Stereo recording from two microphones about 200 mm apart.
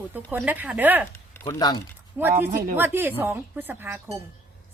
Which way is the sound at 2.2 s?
10° right (ahead or behind).